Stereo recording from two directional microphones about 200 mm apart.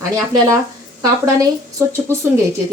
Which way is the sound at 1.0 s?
15° right (ahead or behind).